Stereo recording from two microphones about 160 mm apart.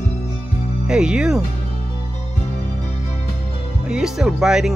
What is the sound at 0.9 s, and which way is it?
Music, 5° right (ahead or behind).